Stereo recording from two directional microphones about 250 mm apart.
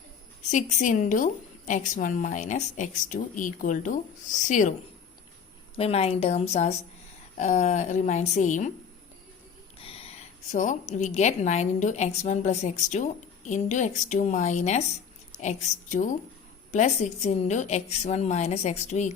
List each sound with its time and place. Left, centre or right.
0.5 s a woman's voice: left
5.7 s a woman's voice: left
9.7 s a sound: left
10.5 s a woman's voice: left